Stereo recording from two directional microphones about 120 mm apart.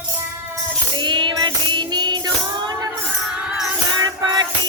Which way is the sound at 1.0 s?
40° right (ahead or behind).